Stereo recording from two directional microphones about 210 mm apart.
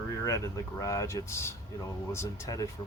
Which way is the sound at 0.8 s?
15° left (ahead or behind).